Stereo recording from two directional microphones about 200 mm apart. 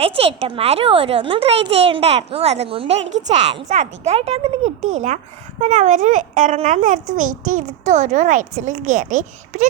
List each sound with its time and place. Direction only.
0.0 s a child's voice: 30° right (ahead or behind)